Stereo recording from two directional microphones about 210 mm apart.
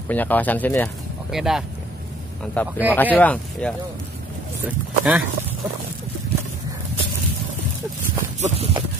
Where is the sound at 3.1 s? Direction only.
5° left (ahead or behind).